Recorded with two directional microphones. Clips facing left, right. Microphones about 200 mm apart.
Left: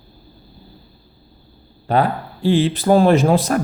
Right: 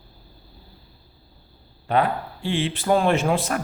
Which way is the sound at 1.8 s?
35° left (ahead or behind).